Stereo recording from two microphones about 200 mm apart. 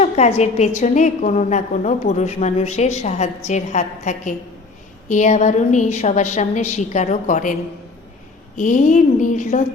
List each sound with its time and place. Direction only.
0.0 s a woman's voice: 35° left (ahead or behind)
8.5 s a woman's voice: 40° left (ahead or behind)